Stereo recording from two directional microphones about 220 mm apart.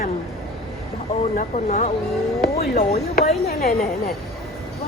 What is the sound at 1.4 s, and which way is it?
Speech, 35° left (ahead or behind).